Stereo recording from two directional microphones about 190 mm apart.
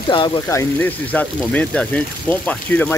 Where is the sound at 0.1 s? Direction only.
25° left (ahead or behind).